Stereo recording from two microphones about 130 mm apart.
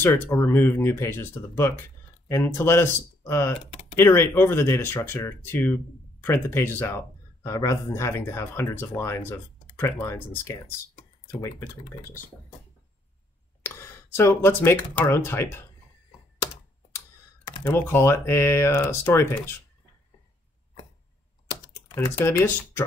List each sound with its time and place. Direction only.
0.0 s speech: 15° left (ahead or behind)
13.6 s speech: 20° left (ahead or behind)
17.6 s speech: 20° left (ahead or behind)
21.5 s computer keyboard: 20° left (ahead or behind)